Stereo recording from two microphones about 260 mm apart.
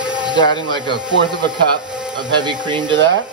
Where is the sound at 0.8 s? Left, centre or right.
Centre.